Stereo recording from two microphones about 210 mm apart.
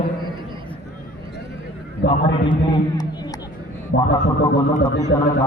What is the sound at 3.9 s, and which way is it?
Speech, 55° left (ahead or behind).